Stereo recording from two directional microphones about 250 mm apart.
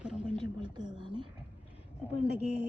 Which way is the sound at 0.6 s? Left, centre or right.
Centre.